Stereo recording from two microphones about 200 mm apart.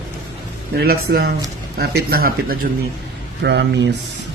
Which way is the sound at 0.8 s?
50° right (ahead or behind).